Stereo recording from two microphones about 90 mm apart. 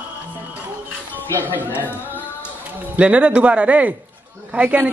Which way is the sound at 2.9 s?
15° right (ahead or behind).